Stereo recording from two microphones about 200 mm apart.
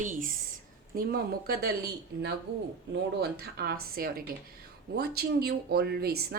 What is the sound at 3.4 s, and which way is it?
A woman's voice, 50° right (ahead or behind).